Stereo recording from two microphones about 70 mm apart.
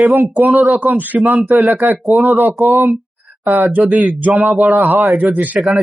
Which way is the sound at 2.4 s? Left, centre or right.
Right.